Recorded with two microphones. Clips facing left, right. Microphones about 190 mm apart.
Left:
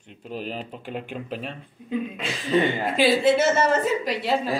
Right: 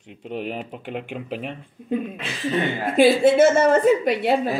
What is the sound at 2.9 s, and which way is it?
A woman's voice, 50° right (ahead or behind).